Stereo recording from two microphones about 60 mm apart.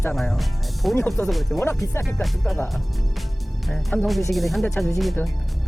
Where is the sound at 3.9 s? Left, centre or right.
Left.